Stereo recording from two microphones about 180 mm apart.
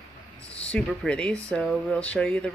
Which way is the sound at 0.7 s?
5° left (ahead or behind).